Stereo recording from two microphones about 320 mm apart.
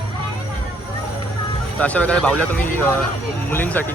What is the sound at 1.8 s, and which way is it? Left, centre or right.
Speech, centre.